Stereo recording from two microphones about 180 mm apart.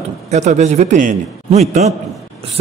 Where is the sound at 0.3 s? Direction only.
40° right (ahead or behind).